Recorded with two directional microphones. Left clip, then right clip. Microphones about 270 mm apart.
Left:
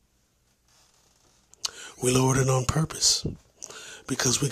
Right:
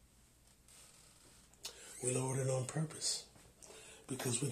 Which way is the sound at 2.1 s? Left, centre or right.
Left.